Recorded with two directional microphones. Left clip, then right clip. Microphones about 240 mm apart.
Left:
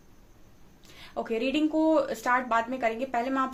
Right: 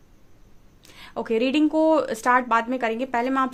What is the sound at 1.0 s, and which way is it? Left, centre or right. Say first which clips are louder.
Speech: right 6 dB; right.